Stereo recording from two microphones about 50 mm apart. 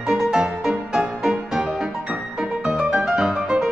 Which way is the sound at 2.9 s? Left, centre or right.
Centre.